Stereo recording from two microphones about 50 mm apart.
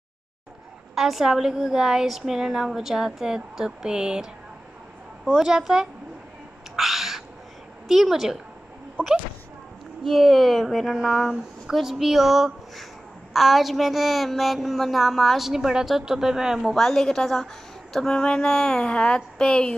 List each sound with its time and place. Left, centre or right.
0.9 s a woman's voice: centre
5.4 s a woman's voice: centre
6.8 s bird: centre
7.9 s a woman's voice: centre
10.0 s a woman's voice: centre
16.7 s speech: centre